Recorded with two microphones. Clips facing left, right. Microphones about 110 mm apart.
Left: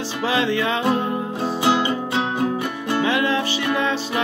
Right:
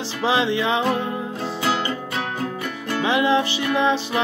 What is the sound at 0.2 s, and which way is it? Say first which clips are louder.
Music: right 1 dB; 20° right (ahead or behind).